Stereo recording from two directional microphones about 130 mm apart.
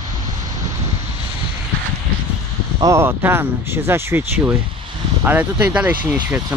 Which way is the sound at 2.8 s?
20° right (ahead or behind).